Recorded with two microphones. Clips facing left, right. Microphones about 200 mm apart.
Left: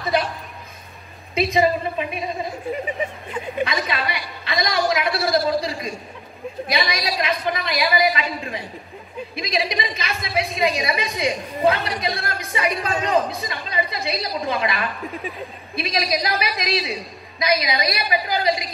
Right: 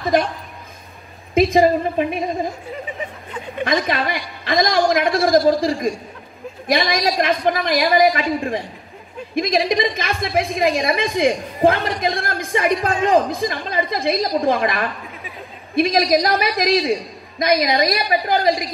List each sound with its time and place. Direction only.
0.0 s a woman's voice: 50° right (ahead or behind)
1.3 s a woman's voice: 50° right (ahead or behind)
3.6 s a woman's voice: 45° right (ahead or behind)